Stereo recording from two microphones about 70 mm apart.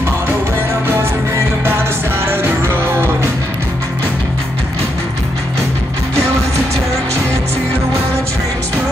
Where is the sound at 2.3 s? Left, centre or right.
Right.